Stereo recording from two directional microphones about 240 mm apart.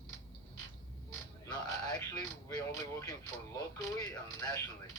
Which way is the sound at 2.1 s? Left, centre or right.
Centre.